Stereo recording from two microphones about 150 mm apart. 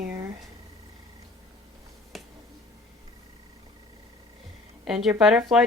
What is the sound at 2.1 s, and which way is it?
Finger snapping, centre (ahead or behind).